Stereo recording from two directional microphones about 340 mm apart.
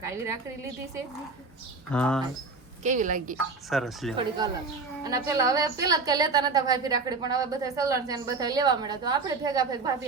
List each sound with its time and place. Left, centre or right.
0.0 s a woman's voice: centre
1.9 s speech: centre
2.8 s a woman's voice: right
3.7 s speech: centre
4.4 s a woman's voice: centre